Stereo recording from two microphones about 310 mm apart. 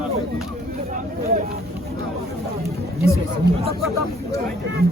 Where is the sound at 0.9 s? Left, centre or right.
Right.